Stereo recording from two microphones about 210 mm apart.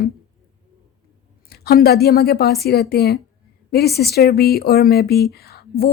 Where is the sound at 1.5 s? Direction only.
45° left (ahead or behind).